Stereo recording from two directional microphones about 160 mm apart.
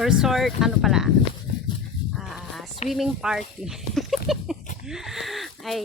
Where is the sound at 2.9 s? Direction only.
Centre (ahead or behind).